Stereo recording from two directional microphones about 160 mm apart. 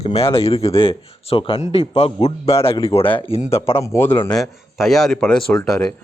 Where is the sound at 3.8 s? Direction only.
15° left (ahead or behind).